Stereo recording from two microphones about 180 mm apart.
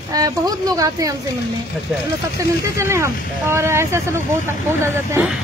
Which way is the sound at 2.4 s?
15° right (ahead or behind).